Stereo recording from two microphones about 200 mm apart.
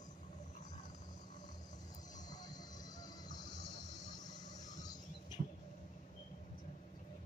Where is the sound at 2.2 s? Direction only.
20° left (ahead or behind).